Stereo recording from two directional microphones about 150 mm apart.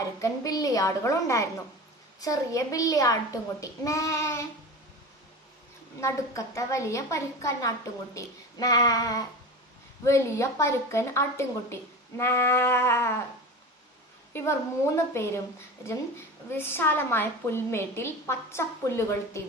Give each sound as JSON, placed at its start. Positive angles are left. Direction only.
{"t": 0.2, "sound": "a child's voice", "side_deg": 25}
{"t": 6.0, "sound": "a child's voice", "side_deg": 20}
{"t": 14.9, "sound": "a woman's voice", "side_deg": 15}